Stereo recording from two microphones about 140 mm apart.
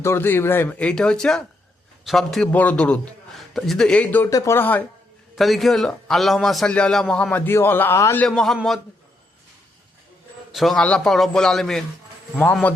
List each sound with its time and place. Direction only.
0.0 s a man's voice: 15° left (ahead or behind); by 2.5 s centre (ahead or behind)
2.5 s a man's voice: 10° left (ahead or behind)
4.3 s a man's voice: 20° left (ahead or behind)
5.4 s a man's voice: centre (ahead or behind); by 8.2 s 20° left (ahead or behind)
8.2 s a man's voice: 5° left (ahead or behind)
10.5 s a man's voice: centre (ahead or behind)